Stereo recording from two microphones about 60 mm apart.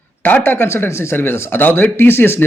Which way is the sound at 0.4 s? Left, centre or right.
Left.